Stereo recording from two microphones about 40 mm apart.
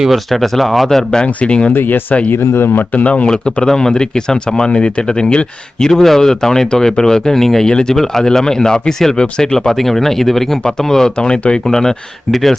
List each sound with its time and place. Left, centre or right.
0.1 s speech: centre
1.4 s speech: left
1.7 s speech: left
2.3 s speech: left
2.9 s speech: left
3.2 s speech: left
5.9 s speech: centre; by 11.6 s left
11.7 s speech: centre